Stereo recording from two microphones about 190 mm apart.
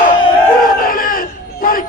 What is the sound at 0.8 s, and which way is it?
Crowd, 50° left (ahead or behind).